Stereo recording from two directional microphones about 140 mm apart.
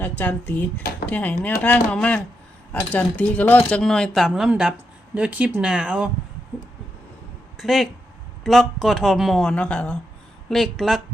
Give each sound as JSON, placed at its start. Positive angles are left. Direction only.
{"t": 0.0, "sound": "speech", "side_deg": 10}
{"t": 0.8, "sound": "speech", "side_deg": 90}
{"t": 1.0, "sound": "speech", "side_deg": 10}
{"t": 7.5, "sound": "speech", "side_deg": 0}